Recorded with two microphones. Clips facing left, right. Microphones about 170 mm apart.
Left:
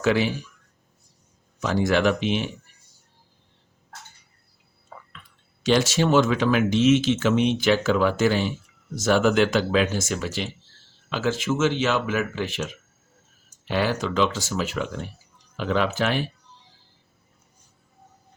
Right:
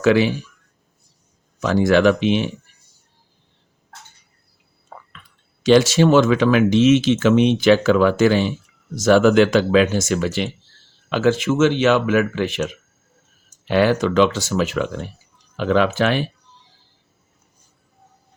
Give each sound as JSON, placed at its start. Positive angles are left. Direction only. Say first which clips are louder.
{"t": 0.0, "sound": "speech", "louder": "right 6 dB", "side_deg": -90}
{"t": 1.6, "sound": "speech", "louder": "right 6 dB", "side_deg": -90}
{"t": 5.6, "sound": "speech", "louder": "right 7 dB", "side_deg": -90}